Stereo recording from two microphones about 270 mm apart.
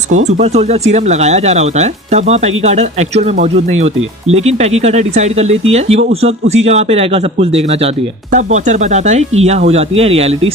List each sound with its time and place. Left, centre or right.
0.3 s speech: right